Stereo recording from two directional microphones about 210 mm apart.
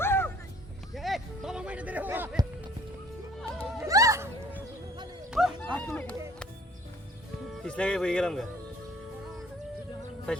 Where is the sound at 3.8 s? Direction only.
15° right (ahead or behind).